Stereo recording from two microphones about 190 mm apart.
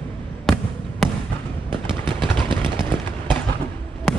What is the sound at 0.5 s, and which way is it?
Fireworks, centre (ahead or behind).